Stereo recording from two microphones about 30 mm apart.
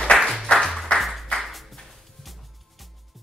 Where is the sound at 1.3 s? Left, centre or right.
Left.